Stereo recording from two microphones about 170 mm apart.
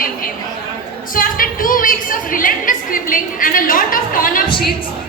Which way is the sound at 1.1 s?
55° left (ahead or behind).